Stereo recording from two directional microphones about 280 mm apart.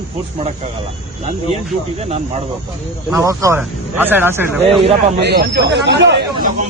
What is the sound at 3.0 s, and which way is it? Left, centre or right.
Speech, centre.